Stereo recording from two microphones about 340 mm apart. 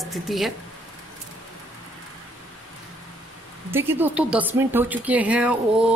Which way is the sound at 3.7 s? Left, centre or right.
Centre.